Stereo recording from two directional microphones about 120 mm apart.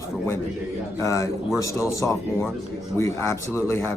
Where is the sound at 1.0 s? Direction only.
25° left (ahead or behind).